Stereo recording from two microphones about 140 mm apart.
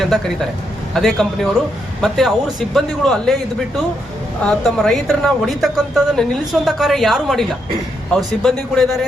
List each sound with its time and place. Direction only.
0.9 s a woman's voice: centre (ahead or behind)
4.4 s a woman's voice: 10° left (ahead or behind)